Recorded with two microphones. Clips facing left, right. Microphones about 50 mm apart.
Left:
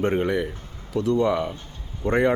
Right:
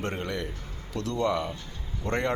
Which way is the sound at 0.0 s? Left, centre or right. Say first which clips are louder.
Left 9 dB; centre.